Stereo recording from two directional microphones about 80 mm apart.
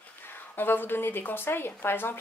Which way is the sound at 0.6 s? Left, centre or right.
Left.